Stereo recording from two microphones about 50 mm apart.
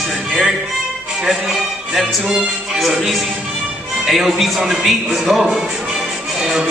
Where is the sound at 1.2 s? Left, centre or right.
Centre.